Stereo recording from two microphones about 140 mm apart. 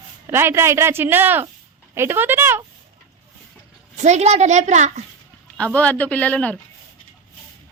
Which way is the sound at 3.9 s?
55° right (ahead or behind).